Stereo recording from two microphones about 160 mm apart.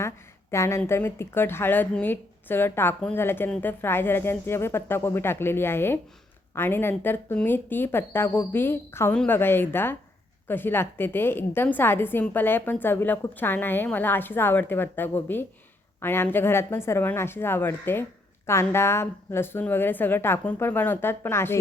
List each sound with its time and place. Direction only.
0.5 s a woman's voice: 15° left (ahead or behind)